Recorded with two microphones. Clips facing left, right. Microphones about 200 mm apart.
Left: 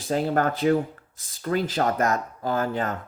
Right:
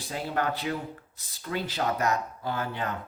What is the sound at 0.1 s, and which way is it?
Speech, 45° left (ahead or behind).